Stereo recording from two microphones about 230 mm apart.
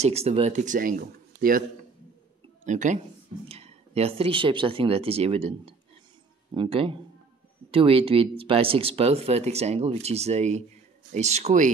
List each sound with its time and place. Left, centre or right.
0.0 s speech: right
2.6 s speech: right